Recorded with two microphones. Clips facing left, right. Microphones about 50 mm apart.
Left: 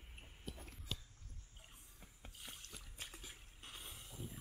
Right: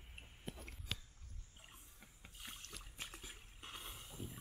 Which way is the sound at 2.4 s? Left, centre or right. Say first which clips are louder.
Right 2 dB; centre.